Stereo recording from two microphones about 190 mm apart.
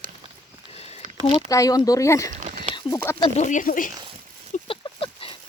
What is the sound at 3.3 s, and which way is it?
Speech, 40° left (ahead or behind).